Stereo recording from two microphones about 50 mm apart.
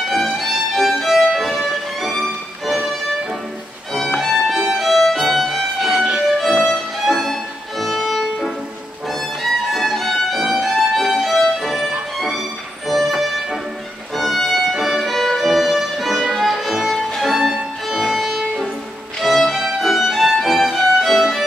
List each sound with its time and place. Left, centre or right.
0.1 s violin: centre
4.2 s violin: centre
5.3 s music: centre
5.9 s music: right
6.3 s violin: centre
12.2 s music: centre
14.1 s violin: centre
19.2 s music: centre